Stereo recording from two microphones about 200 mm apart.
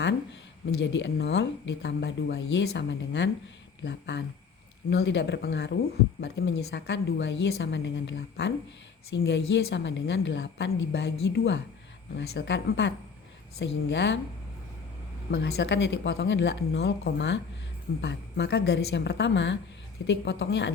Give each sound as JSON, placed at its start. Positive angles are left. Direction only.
{"t": 0.8, "sound": "speech", "side_deg": 60}
{"t": 15.3, "sound": "speech", "side_deg": 55}